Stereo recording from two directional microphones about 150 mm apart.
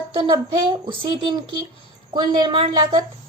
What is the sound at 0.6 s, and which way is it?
A woman's voice, 35° right (ahead or behind).